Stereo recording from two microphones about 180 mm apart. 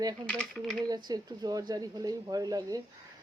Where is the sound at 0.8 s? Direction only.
20° right (ahead or behind).